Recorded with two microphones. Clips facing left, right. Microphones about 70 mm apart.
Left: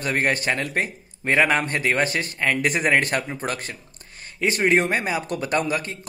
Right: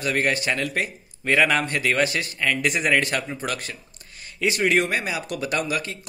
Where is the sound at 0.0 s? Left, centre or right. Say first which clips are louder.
Even; left.